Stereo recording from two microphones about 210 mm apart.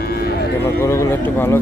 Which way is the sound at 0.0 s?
45° left (ahead or behind).